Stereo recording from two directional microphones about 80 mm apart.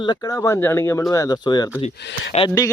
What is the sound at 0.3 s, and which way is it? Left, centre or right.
Speech, left.